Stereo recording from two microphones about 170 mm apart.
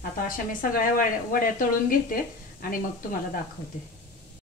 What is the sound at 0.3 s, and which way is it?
A woman's voice, 55° left (ahead or behind).